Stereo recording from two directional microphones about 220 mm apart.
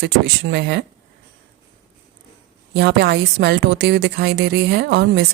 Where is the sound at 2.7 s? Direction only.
50° right (ahead or behind).